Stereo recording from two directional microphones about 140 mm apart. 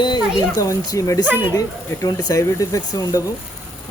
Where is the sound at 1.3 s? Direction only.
15° right (ahead or behind).